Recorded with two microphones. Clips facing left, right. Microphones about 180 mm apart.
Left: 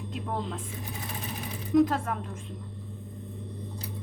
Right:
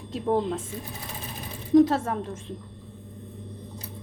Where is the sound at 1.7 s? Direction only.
30° right (ahead or behind).